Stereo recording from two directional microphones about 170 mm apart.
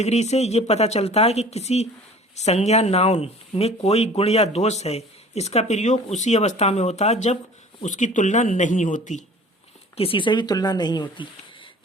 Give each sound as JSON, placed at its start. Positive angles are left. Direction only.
{"t": 0.0, "sound": "a man's voice", "side_deg": 40}
{"t": 10.0, "sound": "speech", "side_deg": 30}